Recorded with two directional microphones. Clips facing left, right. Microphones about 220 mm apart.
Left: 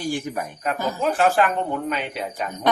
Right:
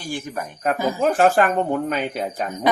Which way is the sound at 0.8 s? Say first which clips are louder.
Right 3 dB; 10° right (ahead or behind).